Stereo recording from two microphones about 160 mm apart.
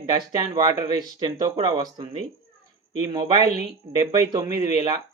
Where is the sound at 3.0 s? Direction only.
30° right (ahead or behind).